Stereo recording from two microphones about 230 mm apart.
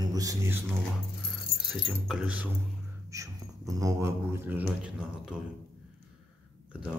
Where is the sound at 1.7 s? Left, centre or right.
Centre.